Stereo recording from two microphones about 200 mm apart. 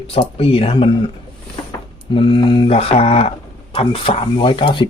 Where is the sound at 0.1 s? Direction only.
30° left (ahead or behind).